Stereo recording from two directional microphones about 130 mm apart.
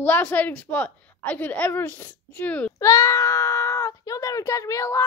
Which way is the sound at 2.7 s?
25° left (ahead or behind).